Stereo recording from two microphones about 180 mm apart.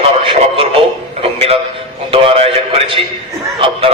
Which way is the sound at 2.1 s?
35° right (ahead or behind).